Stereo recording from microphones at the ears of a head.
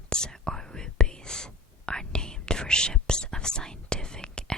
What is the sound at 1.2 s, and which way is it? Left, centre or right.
Whispering, centre.